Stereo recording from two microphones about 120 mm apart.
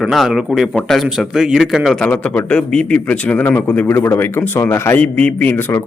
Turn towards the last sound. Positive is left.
turn(degrees=15)  # may be behind; listen again after turning